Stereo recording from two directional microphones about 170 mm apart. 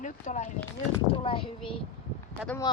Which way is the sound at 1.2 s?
30° left (ahead or behind).